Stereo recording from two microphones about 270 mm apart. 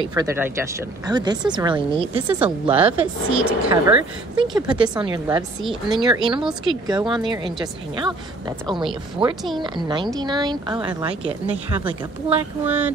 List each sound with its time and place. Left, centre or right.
0.0 s a woman's voice: centre
2.1 s a woman's voice: centre
2.4 s a woman's voice: right
3.0 s a woman's voice: centre
5.6 s speech: centre
5.9 s a woman's voice: centre
12.6 s a woman's voice: centre